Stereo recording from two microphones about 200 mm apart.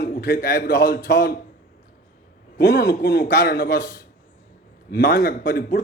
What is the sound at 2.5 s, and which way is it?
A man's voice, 50° left (ahead or behind).